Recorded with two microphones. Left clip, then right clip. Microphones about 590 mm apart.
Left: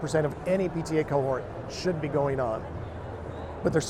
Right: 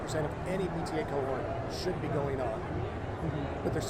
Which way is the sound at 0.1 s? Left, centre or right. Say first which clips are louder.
Left 9 dB; left.